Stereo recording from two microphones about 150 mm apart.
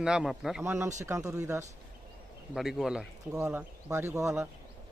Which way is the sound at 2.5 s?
Centre (ahead or behind).